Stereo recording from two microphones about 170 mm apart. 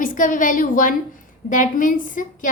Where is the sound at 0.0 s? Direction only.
50° left (ahead or behind).